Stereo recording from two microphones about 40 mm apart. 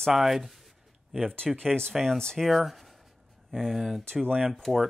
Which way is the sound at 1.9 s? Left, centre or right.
Centre.